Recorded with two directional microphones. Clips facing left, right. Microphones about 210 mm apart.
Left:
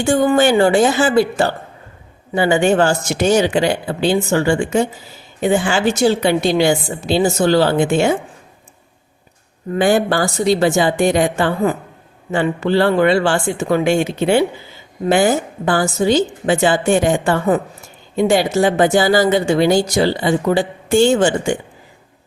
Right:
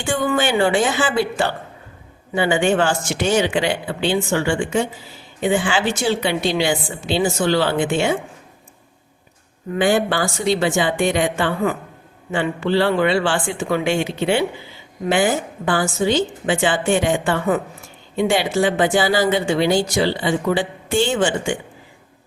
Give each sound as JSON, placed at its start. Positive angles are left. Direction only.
{"t": 0.0, "sound": "speech", "side_deg": 40}
{"t": 9.7, "sound": "speech", "side_deg": 40}